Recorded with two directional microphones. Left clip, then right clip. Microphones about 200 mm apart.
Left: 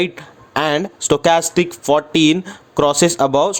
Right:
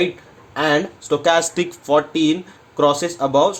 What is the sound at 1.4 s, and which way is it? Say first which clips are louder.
Speech: left 2 dB; 30° left (ahead or behind).